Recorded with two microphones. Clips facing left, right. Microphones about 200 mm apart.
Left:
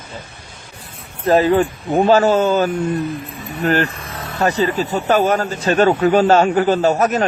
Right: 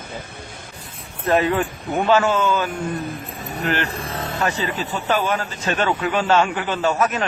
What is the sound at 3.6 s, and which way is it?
Speech, 40° left (ahead or behind).